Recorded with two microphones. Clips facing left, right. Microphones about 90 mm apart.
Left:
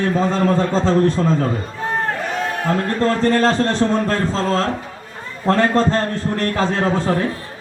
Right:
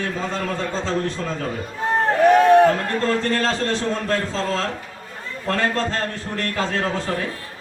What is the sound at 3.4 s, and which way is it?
Speech, 40° left (ahead or behind).